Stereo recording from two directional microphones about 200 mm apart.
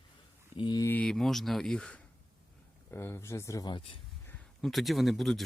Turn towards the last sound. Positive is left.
turn(degrees=0)  # may be behind; listen again after turning